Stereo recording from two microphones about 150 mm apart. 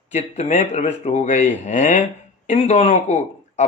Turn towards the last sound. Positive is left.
turn(degrees=50)  # may be behind; listen again after turning